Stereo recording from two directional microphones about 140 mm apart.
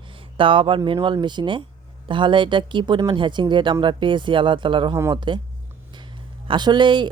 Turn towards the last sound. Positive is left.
turn(degrees=-35)  # may be behind; listen again after turning